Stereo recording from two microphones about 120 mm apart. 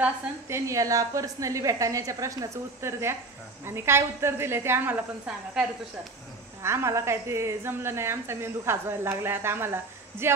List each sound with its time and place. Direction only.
0.0 s a woman's voice: 25° right (ahead or behind); by 5.7 s 5° right (ahead or behind)
6.6 s a woman's voice: 20° right (ahead or behind)